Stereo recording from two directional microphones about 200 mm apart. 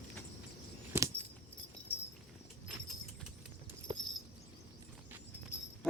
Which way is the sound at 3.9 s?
20° right (ahead or behind).